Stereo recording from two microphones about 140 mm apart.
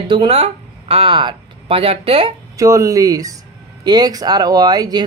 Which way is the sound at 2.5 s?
20° right (ahead or behind).